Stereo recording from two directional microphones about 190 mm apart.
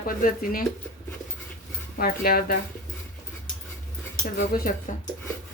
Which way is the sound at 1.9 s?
50° left (ahead or behind).